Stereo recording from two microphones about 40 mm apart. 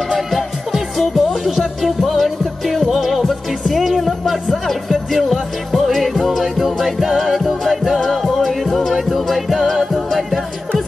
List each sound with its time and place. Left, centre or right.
0.7 s music: centre